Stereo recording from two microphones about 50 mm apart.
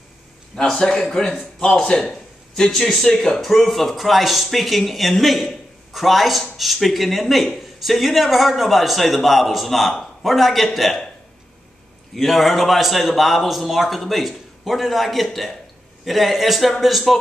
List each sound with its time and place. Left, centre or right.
0.6 s a man's voice: centre
12.2 s speech: centre